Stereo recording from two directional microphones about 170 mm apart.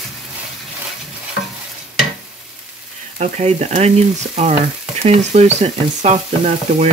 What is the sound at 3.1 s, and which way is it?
Frying, 40° right (ahead or behind).